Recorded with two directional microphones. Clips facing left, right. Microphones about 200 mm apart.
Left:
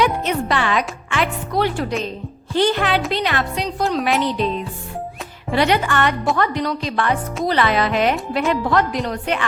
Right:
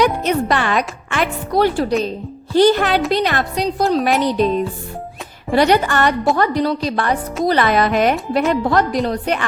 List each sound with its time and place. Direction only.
0.0 s a woman's voice: 40° right (ahead or behind)
5.5 s a woman's voice: 40° right (ahead or behind)